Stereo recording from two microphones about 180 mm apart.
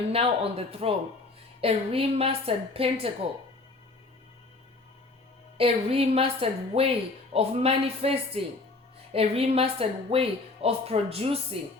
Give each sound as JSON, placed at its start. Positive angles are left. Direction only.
{"t": 0.1, "sound": "speech", "side_deg": -30}
{"t": 5.5, "sound": "speech", "side_deg": -30}